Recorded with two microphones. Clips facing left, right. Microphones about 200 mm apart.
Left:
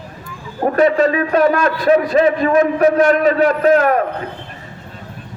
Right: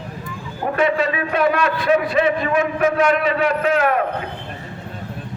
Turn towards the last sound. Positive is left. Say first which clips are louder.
# left 5 dB
turn(degrees=40)  # may be behind; listen again after turning